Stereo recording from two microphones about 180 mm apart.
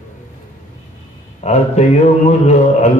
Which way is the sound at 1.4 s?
35° left (ahead or behind).